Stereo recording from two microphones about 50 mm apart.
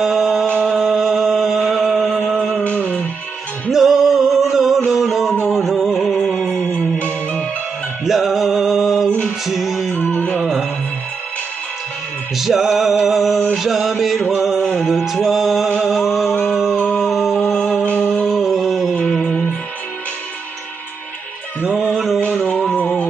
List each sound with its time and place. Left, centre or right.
0.0 s a sound: centre
0.7 s music: centre
2.6 s music: left
3.7 s music: centre
6.7 s music: left
8.0 s music: centre
12.4 s music: centre
13.6 s mantra: centre
14.3 s music: centre
14.6 s music: centre
18.3 s a sound: centre
19.0 s music: centre
21.9 s a sound: centre
22.4 s music: left